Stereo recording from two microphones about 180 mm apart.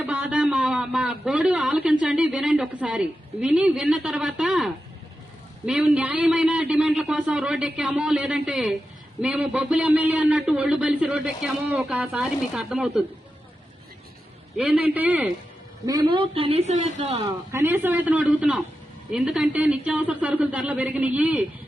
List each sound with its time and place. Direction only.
0.0 s a sound: 5° right (ahead or behind)
5.6 s a man's voice: 5° right (ahead or behind)
14.5 s a man's voice: 5° right (ahead or behind)
15.9 s a woman's voice: 25° right (ahead or behind)
17.5 s a man's voice: 15° right (ahead or behind)